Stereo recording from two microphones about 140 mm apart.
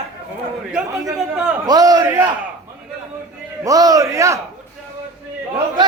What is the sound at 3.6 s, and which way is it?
Speech, 25° right (ahead or behind).